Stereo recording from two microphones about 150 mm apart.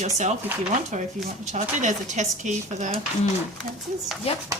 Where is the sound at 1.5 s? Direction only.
50° right (ahead or behind).